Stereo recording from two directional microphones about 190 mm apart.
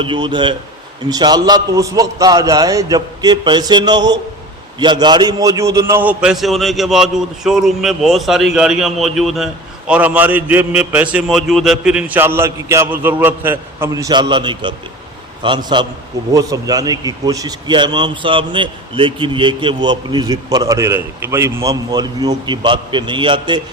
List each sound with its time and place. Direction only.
0.0 s a man's voice: 25° right (ahead or behind)